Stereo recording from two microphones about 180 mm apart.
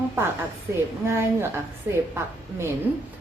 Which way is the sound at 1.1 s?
15° right (ahead or behind).